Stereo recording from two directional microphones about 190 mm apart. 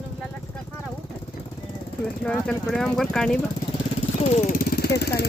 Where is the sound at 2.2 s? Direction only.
5° left (ahead or behind).